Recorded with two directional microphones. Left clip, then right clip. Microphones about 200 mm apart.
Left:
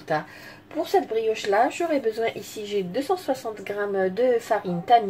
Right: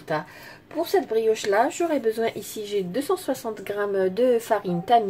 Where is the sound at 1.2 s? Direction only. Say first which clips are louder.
Right 1 dB; 20° right (ahead or behind).